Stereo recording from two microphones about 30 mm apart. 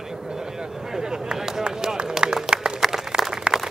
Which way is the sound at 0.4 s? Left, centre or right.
Centre.